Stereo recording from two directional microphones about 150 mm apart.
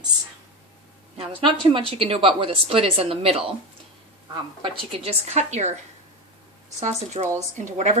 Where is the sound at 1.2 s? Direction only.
35° right (ahead or behind).